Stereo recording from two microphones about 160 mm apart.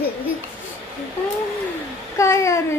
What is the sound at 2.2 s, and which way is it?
Speech, 20° left (ahead or behind).